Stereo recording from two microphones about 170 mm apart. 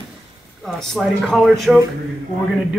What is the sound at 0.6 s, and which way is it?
Speech, centre (ahead or behind).